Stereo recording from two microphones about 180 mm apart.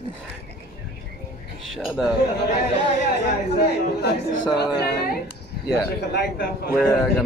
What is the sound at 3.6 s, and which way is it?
Speech, 65° left (ahead or behind).